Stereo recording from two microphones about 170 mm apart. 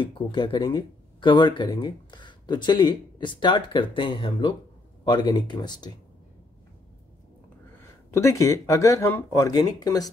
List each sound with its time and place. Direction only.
0.0 s speech: 30° left (ahead or behind)
8.1 s speech: 15° left (ahead or behind)